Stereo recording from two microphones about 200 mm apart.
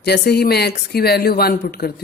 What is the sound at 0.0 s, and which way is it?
Speech, 55° left (ahead or behind).